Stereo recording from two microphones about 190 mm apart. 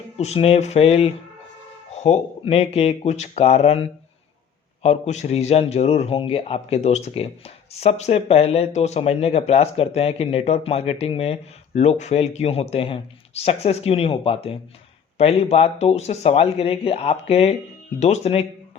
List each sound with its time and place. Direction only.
0.2 s a man's voice: 30° left (ahead or behind)